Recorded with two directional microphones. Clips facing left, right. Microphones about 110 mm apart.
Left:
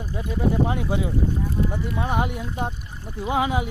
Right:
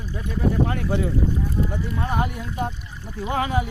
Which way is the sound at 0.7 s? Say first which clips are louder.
Right 1 dB; 15° left (ahead or behind).